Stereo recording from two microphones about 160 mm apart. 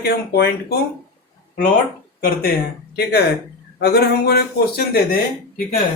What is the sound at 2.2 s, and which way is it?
Speech, 70° left (ahead or behind).